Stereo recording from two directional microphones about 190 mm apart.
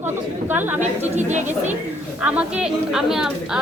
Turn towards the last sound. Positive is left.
turn(degrees=-5)  # may be behind; listen again after turning